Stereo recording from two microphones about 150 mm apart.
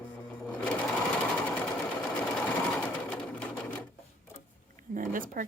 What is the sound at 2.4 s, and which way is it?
Sewing machine, 10° left (ahead or behind).